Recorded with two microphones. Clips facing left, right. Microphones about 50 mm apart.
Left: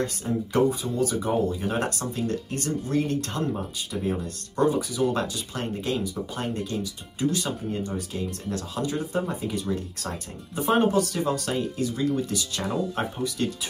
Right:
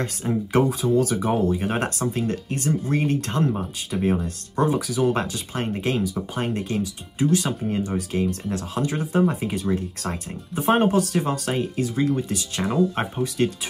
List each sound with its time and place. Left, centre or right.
0.0 s speech: right
3.9 s speech: right
4.6 s speech: right
8.5 s speech: right